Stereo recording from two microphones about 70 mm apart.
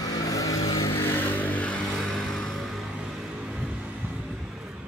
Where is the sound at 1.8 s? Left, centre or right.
Centre.